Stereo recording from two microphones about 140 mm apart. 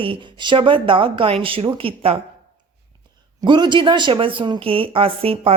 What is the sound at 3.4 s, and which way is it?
Speech, 35° right (ahead or behind).